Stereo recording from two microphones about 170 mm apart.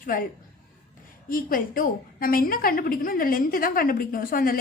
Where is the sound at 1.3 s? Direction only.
55° left (ahead or behind).